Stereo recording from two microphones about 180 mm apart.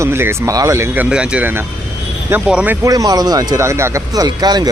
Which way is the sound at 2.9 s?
20° right (ahead or behind).